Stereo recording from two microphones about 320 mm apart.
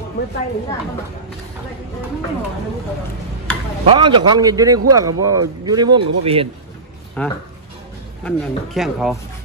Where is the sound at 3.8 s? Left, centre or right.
Centre.